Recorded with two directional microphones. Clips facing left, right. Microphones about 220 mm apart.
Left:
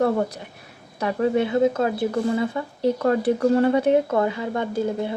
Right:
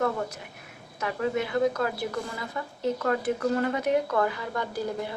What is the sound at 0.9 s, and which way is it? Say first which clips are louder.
Speech: left 7 dB; 30° left (ahead or behind).